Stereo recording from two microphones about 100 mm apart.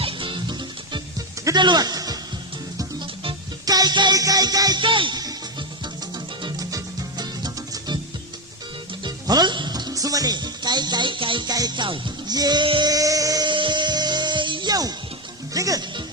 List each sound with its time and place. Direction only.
0.0 s music: 60° right (ahead or behind)
1.5 s a man's voice: 45° right (ahead or behind)
3.7 s music: 40° right (ahead or behind)
4.8 s speech: 55° right (ahead or behind)
5.2 s music: 50° right (ahead or behind)
6.6 s music: 35° right (ahead or behind)
9.0 s speech: 45° right (ahead or behind)
11.4 s music: 40° right (ahead or behind)
12.6 s speech: 60° right (ahead or behind)
12.9 s music: 35° right (ahead or behind)
13.5 s music: 50° right (ahead or behind); by 15.8 s 35° right (ahead or behind)